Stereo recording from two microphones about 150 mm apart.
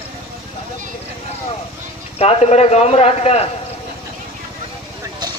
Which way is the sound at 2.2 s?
45° left (ahead or behind).